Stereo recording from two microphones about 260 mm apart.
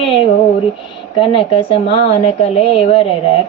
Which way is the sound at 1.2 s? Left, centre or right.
Left.